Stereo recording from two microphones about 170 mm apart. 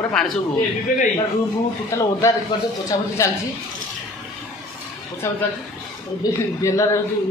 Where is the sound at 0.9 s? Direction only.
55° left (ahead or behind).